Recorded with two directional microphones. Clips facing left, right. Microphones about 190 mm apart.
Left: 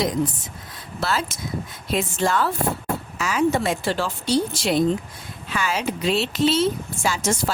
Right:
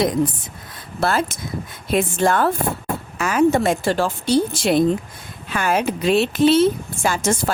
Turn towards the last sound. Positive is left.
turn(degrees=-55)  # may be behind; listen again after turning